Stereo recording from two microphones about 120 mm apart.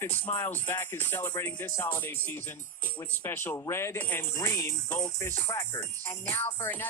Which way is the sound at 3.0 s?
20° left (ahead or behind).